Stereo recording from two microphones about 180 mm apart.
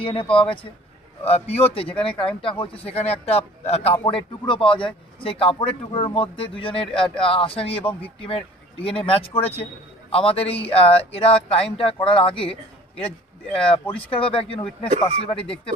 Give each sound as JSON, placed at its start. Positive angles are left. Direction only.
{"t": 0.0, "sound": "speech", "side_deg": 30}